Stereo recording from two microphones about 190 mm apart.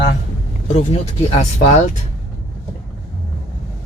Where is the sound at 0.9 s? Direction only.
35° left (ahead or behind).